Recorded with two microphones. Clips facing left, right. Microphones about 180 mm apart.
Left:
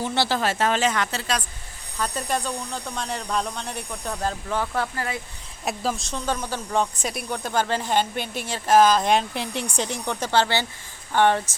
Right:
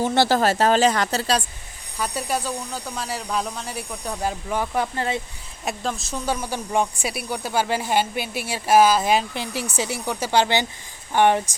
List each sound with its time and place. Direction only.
0.0 s speech: 45° right (ahead or behind)
2.0 s speech: 10° right (ahead or behind)
4.9 s speech: 25° right (ahead or behind)
5.6 s speech: centre (ahead or behind); by 11.5 s 15° right (ahead or behind)